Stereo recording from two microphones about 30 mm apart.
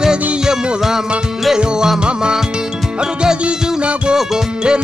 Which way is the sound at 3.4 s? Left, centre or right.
Right.